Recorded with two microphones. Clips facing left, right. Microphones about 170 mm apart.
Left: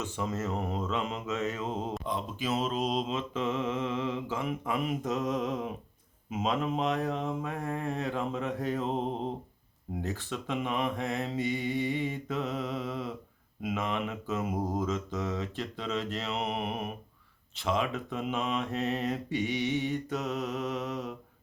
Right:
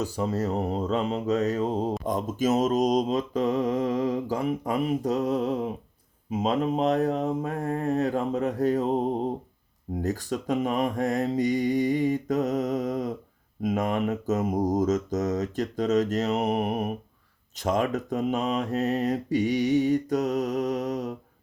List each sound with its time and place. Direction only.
0.0 s mantra: 35° right (ahead or behind)